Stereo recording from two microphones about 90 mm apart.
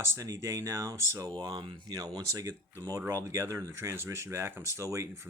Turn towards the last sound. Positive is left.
turn(degrees=-35)  # may be behind; listen again after turning